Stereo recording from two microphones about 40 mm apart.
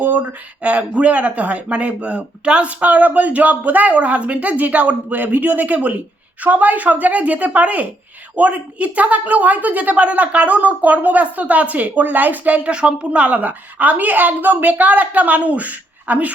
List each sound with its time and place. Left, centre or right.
0.0 s a sound: right
0.6 s a woman's voice: right
12.6 s a woman's voice: right